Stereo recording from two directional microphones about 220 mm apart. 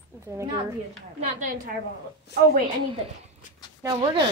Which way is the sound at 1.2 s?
35° right (ahead or behind).